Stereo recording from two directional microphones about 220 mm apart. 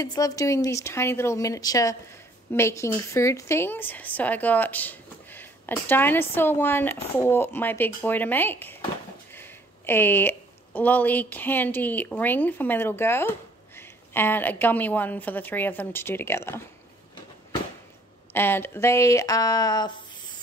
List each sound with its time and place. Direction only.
0.0 s speech: 15° left (ahead or behind)
18.3 s speech: 10° left (ahead or behind)